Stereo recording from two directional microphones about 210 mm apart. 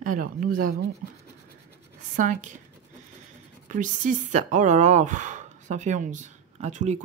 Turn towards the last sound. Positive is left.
turn(degrees=-35)  # may be behind; listen again after turning